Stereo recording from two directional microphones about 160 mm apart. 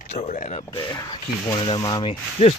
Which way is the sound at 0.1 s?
45° left (ahead or behind).